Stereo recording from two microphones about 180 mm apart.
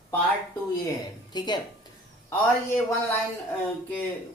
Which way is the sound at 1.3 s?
25° left (ahead or behind).